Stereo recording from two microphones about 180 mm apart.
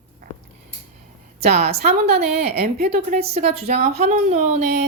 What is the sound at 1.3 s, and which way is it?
Speech, 35° right (ahead or behind).